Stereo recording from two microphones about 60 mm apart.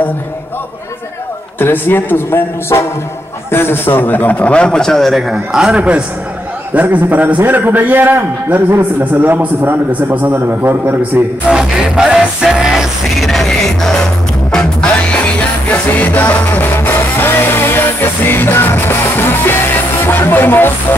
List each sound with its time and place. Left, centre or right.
1.6 s a man's voice: left; by 5.2 s centre
5.3 s a man's voice: centre
5.8 s a man's voice: centre
11.5 s a man's voice: centre
11.8 s music: centre; by 20.7 s left